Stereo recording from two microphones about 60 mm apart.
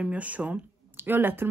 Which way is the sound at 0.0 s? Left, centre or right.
Right.